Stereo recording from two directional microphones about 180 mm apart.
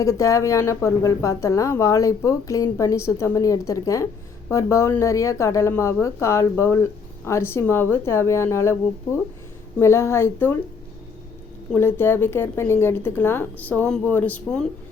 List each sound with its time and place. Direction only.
0.0 s speech: 15° left (ahead or behind)
9.7 s speech: 15° left (ahead or behind)
11.7 s speech: 10° left (ahead or behind)